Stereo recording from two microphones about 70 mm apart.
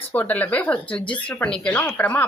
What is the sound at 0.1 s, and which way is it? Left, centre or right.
A woman's voice, left.